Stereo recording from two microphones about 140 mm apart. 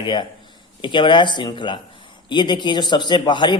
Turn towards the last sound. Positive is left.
turn(degrees=30)  # may be behind; listen again after turning